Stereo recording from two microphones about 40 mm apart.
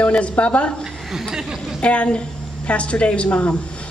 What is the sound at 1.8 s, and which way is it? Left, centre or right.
Speech, left.